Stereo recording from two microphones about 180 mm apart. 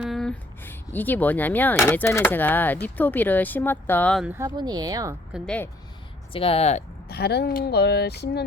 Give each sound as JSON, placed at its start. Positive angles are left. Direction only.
{"t": 0.0, "sound": "speech", "side_deg": 0}
{"t": 4.4, "sound": "speech", "side_deg": -25}
{"t": 5.3, "sound": "speech", "side_deg": 5}
{"t": 6.3, "sound": "speech", "side_deg": 30}
{"t": 7.1, "sound": "speech", "side_deg": 65}